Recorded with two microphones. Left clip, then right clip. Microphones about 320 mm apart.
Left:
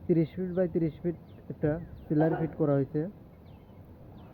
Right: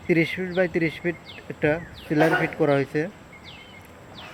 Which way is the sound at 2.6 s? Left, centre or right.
Centre.